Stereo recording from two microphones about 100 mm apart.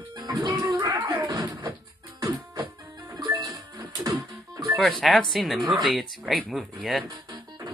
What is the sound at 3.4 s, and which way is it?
Music, 35° right (ahead or behind).